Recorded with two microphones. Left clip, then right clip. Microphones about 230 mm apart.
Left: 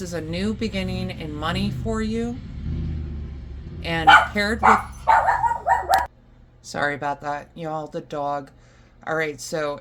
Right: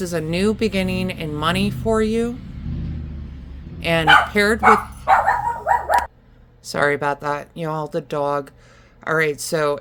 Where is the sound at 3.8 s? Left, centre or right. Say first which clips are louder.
Even; right.